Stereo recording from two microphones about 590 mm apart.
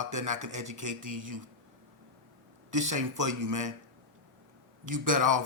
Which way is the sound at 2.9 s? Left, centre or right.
Right.